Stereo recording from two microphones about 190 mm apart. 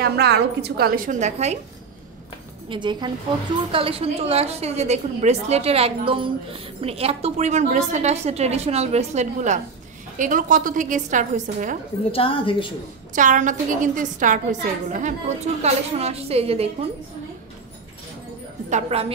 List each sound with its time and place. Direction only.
0.0 s a woman's voice: 60° right (ahead or behind); by 1.6 s 35° right (ahead or behind)
2.7 s a woman's voice: 25° right (ahead or behind); by 11.8 s 40° right (ahead or behind)
12.1 s a woman's voice: 30° left (ahead or behind)
13.1 s a woman's voice: 40° right (ahead or behind)
18.7 s a woman's voice: 35° right (ahead or behind)